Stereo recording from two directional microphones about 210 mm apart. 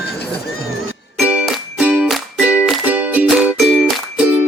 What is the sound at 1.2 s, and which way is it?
Music, 5° right (ahead or behind).